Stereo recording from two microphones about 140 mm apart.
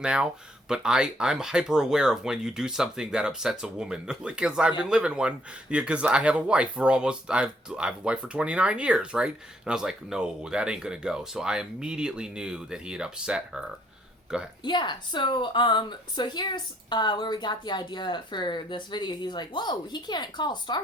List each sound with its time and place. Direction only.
0.0 s speech: 5° right (ahead or behind)
14.6 s a woman's voice: 30° left (ahead or behind)